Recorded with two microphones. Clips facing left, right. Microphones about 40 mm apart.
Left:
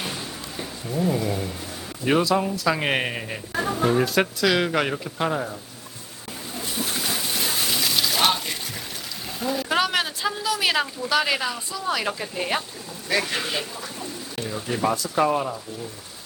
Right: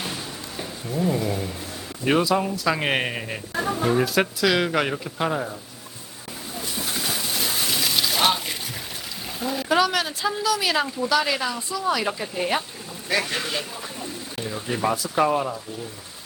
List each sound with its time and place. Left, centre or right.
0.0 s speech: centre
6.5 s a sound: centre
9.4 s speech: centre
9.6 s speech: left
11.3 s speech: centre
13.1 s speech: centre
14.3 s speech: centre